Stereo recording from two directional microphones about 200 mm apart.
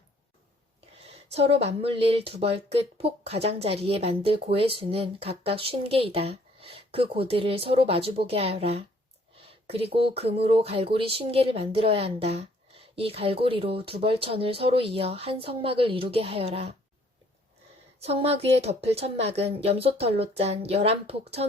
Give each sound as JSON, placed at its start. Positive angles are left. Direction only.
{"t": 1.3, "sound": "speech", "side_deg": -30}
{"t": 18.0, "sound": "speech", "side_deg": -30}